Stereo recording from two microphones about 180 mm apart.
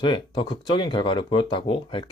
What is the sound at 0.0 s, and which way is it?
Speech, 25° left (ahead or behind).